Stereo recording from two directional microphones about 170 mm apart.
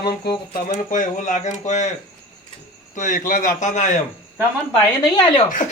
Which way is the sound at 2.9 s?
50° left (ahead or behind).